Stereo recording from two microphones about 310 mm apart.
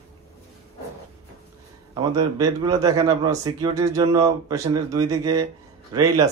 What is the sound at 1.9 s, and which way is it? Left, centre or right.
A man's voice, centre.